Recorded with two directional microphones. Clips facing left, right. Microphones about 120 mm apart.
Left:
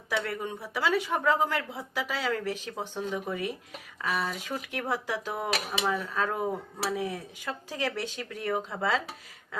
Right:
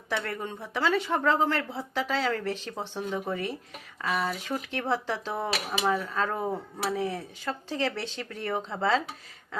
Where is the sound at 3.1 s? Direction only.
25° right (ahead or behind).